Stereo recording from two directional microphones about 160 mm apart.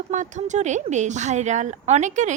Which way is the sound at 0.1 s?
50° right (ahead or behind).